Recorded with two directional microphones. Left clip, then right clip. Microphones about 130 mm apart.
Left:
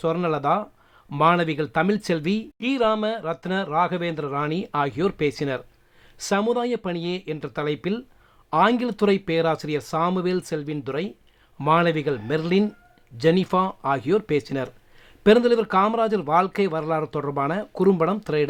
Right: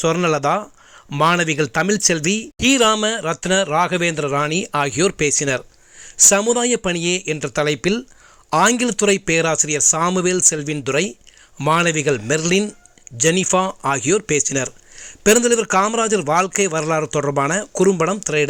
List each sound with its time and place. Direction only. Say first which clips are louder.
0.0 s a man's voice: right 6 dB; 25° right (ahead or behind)